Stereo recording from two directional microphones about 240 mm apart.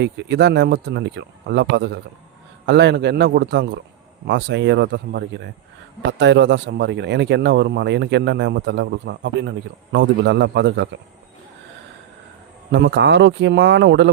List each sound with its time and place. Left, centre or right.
0.0 s speech: right
12.7 s speech: right